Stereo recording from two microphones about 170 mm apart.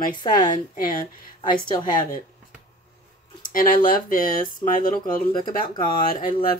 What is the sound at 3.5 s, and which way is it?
Speech, 55° left (ahead or behind).